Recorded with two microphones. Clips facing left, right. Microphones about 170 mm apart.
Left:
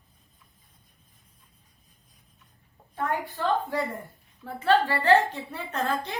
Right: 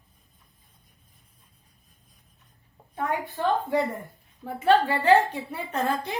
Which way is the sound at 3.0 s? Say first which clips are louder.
Right 1 dB; 15° right (ahead or behind).